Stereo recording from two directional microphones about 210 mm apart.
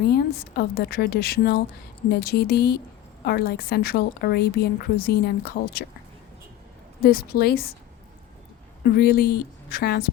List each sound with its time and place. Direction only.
0.1 s a woman's voice: 50° left (ahead or behind)
7.0 s a woman's voice: 45° left (ahead or behind)
8.9 s a woman's voice: 50° left (ahead or behind)